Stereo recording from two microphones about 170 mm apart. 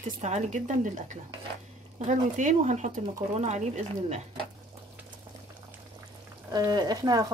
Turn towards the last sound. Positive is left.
turn(degrees=-25)  # may be behind; listen again after turning